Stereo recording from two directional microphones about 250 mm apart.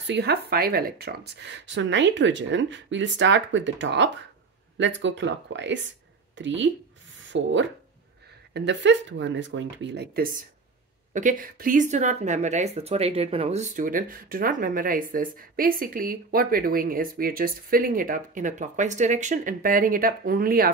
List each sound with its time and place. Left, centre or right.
0.0 s speech: right
8.5 s speech: right